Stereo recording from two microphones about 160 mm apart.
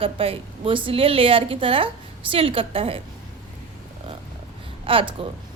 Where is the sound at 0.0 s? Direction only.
35° right (ahead or behind).